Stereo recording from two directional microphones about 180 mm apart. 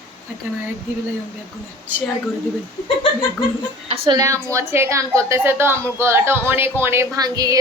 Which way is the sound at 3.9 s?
20° right (ahead or behind).